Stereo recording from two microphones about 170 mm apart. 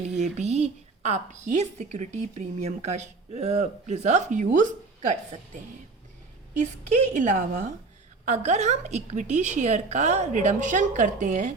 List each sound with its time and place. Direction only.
0.2 s a woman's voice: 40° right (ahead or behind)
7.1 s a woman's voice: 45° right (ahead or behind)